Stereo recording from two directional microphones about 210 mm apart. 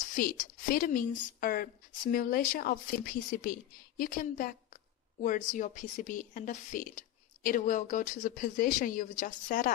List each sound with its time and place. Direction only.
0.0 s speech: 40° left (ahead or behind)